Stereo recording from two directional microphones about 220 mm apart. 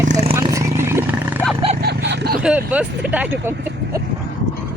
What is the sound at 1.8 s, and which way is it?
Vehicle, 50° right (ahead or behind).